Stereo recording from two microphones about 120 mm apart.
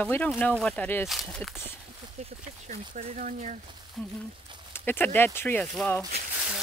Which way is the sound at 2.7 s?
65° right (ahead or behind).